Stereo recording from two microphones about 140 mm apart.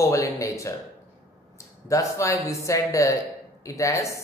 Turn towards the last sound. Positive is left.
turn(degrees=20)  # may be behind; listen again after turning